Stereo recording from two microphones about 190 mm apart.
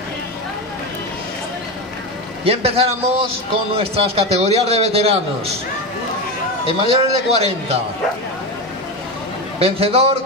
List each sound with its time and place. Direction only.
2.4 s a man's voice: 30° right (ahead or behind)
6.7 s a man's voice: 35° right (ahead or behind)
9.6 s a man's voice: 30° right (ahead or behind)